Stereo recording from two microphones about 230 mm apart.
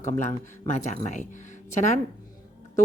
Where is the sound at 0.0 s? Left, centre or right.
Left.